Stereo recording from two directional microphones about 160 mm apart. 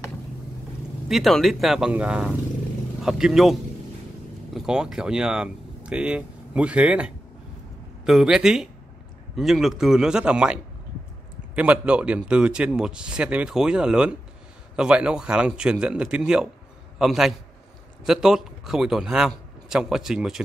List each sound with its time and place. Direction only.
1.0 s a man's voice: centre (ahead or behind)
4.6 s a man's voice: 5° right (ahead or behind)